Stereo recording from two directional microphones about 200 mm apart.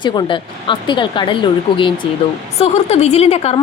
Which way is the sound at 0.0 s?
20° left (ahead or behind).